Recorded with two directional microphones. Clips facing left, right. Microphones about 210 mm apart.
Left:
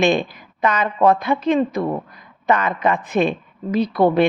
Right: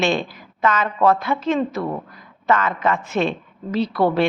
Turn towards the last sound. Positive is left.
turn(degrees=20)  # may be behind; listen again after turning